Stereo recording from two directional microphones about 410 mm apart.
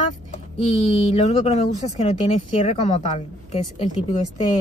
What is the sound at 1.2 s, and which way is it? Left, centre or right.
Speech, centre.